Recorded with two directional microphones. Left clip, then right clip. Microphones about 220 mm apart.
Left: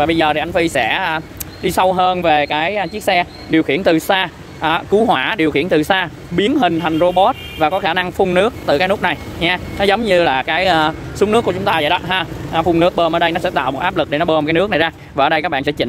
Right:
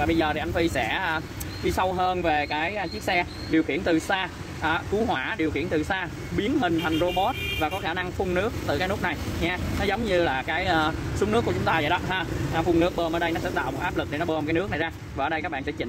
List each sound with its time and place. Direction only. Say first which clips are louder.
0.0 s speech: left 10 dB; 40° left (ahead or behind)